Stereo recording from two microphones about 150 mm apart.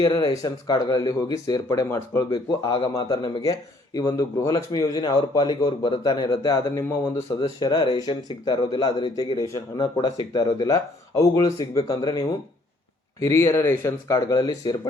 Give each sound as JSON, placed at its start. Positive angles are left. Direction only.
{"t": 0.0, "sound": "speech", "side_deg": 25}